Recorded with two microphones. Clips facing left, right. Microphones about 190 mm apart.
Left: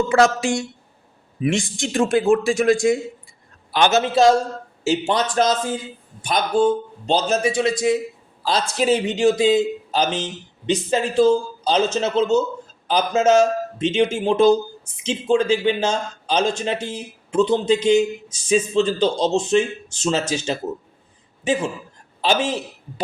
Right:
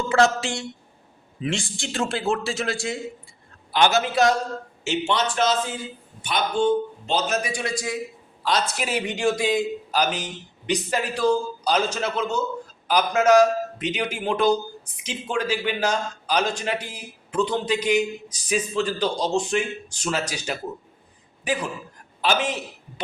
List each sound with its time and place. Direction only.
1.4 s a man's voice: 15° left (ahead or behind)